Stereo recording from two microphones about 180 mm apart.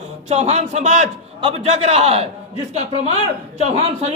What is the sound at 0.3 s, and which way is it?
A man's voice, 35° right (ahead or behind).